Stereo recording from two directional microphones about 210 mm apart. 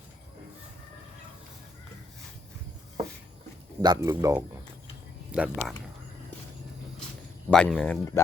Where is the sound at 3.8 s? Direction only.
15° right (ahead or behind).